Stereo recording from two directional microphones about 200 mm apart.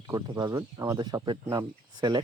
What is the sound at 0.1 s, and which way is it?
Speech, 20° right (ahead or behind).